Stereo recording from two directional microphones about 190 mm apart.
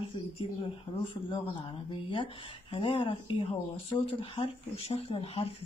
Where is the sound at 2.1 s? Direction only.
25° left (ahead or behind).